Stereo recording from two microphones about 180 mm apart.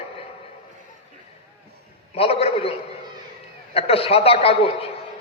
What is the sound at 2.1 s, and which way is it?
Speech, 35° left (ahead or behind).